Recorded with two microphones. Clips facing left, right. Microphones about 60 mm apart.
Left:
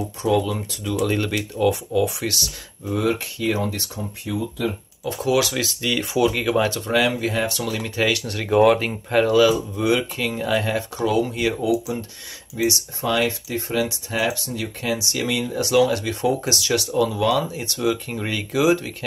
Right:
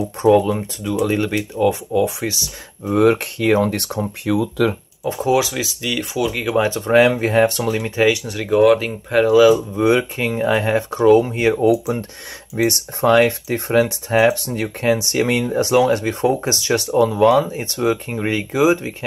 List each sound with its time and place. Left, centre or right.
0.2 s speech: right
0.8 s speech: centre
2.8 s speech: right
5.0 s speech: right
5.5 s speech: centre
6.9 s speech: right; by 8.5 s centre
8.5 s speech: centre
9.3 s speech: centre
9.8 s speech: right
11.6 s speech: right